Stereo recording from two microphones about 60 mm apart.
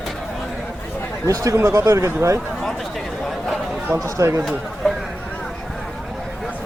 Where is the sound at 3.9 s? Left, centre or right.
Right.